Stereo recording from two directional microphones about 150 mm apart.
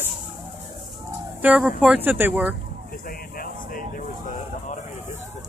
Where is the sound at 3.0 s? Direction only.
75° left (ahead or behind); by 4.8 s 55° left (ahead or behind).